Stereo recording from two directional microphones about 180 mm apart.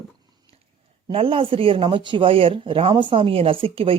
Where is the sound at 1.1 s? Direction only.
30° right (ahead or behind).